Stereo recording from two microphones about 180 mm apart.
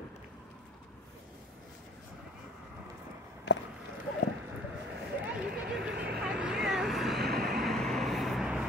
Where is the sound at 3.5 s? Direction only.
75° left (ahead or behind).